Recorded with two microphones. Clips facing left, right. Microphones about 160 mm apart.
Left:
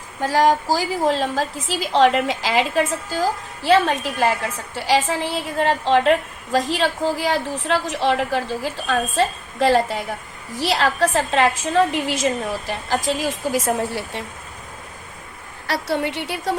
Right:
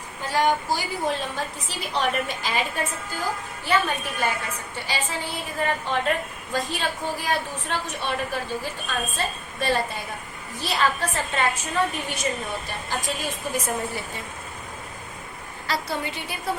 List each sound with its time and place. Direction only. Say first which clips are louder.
0.2 s a woman's voice: left 6 dB; 90° left
15.6 s a woman's voice: left 6 dB; 70° left (ahead or behind)